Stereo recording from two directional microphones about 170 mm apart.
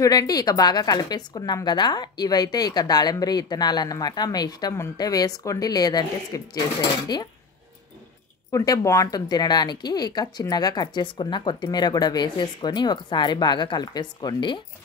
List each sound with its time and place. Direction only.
0.0 s a woman's voice: 20° left (ahead or behind)
8.5 s a woman's voice: 20° left (ahead or behind)